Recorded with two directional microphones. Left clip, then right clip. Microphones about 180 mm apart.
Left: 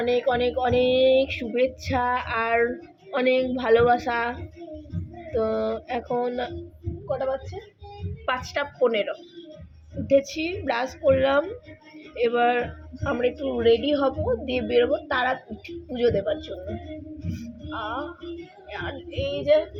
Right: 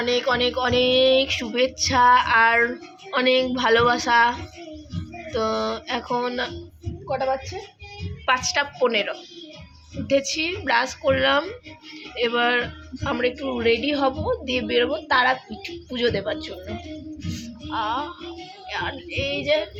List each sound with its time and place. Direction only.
0.0 s speech: 5° right (ahead or behind)
7.1 s speech: 15° right (ahead or behind)
8.3 s speech: centre (ahead or behind)
17.7 s music: 10° right (ahead or behind)
18.7 s speech: 10° right (ahead or behind)